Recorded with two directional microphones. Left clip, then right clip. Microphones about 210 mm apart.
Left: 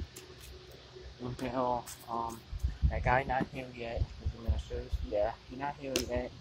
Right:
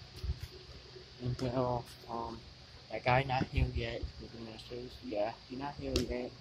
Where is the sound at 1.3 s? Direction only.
Centre (ahead or behind).